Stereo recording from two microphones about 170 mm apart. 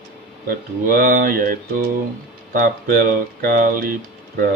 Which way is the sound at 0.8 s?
55° right (ahead or behind).